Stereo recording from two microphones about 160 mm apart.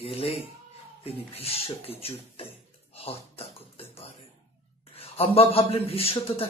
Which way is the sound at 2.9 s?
40° left (ahead or behind).